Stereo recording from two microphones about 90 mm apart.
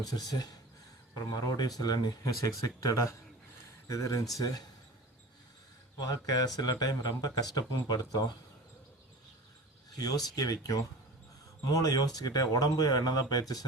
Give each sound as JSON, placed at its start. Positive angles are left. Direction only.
{"t": 0.0, "sound": "speech", "side_deg": 45}
{"t": 2.6, "sound": "speech", "side_deg": 35}
{"t": 6.0, "sound": "speech", "side_deg": 45}
{"t": 9.9, "sound": "speech", "side_deg": 45}